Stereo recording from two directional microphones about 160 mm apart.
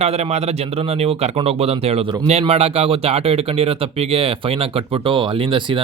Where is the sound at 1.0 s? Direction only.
40° right (ahead or behind).